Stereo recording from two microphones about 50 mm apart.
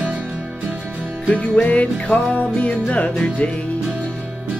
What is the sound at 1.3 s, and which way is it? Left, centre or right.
Music, left.